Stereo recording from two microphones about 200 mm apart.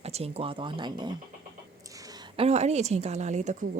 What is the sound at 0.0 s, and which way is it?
Speech, 30° right (ahead or behind).